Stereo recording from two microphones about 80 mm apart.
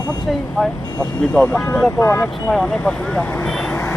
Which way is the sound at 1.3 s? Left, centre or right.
Centre.